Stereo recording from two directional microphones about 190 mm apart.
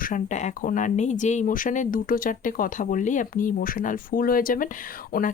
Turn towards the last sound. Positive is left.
turn(degrees=50)  # may be behind; listen again after turning